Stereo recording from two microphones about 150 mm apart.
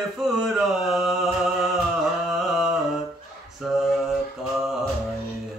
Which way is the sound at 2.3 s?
Centre (ahead or behind).